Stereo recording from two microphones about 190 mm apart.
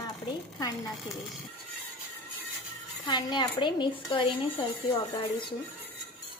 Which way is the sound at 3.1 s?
20° left (ahead or behind).